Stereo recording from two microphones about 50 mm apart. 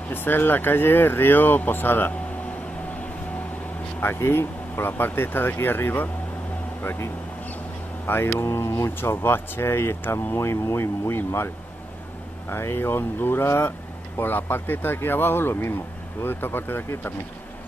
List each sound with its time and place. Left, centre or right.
0.1 s speech: left
4.0 s speech: left
6.8 s vehicle: left
8.1 s speech: left
8.9 s speech: left